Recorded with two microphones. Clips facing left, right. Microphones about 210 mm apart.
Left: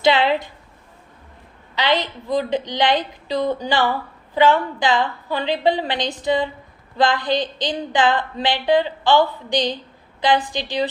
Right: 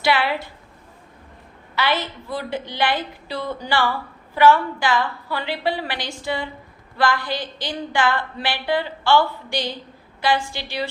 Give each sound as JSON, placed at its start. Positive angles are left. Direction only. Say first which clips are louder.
{"t": 0.0, "sound": "a woman's voice", "louder": "left 4 dB", "side_deg": 20}
{"t": 1.7, "sound": "a woman's voice", "louder": "left 3 dB", "side_deg": 20}